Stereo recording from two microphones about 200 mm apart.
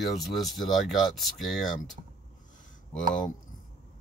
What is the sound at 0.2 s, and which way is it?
Speech, centre (ahead or behind).